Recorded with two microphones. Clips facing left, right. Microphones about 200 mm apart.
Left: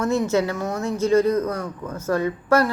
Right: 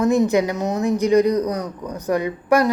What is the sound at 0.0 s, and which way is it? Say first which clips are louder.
A woman's voice: right 4 dB; 15° right (ahead or behind).